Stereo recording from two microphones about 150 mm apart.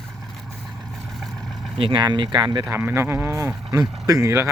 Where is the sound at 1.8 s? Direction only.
30° right (ahead or behind).